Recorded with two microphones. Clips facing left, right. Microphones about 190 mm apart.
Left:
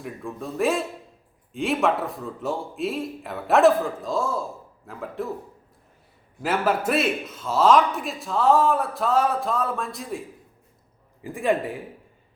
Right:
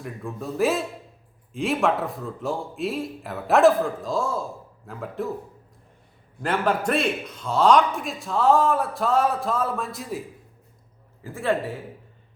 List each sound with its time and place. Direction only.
0.0 s a man's voice: centre (ahead or behind)
6.4 s a man's voice: 5° left (ahead or behind)
11.2 s speech: 15° left (ahead or behind)